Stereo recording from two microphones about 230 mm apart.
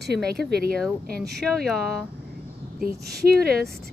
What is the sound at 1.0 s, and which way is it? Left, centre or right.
Speech, right.